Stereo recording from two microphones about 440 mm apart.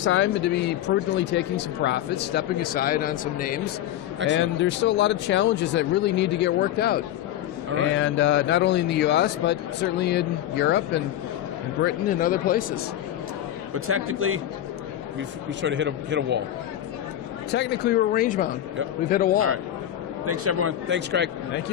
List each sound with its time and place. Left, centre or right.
0.0 s speech: left
13.7 s a man's voice: right
15.6 s a man's voice: right
17.5 s speech: left
20.2 s a man's voice: right